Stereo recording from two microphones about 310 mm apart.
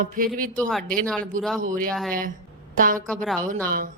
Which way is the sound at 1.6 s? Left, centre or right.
Right.